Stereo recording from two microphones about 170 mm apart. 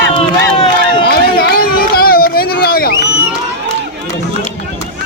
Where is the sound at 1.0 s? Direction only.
65° left (ahead or behind).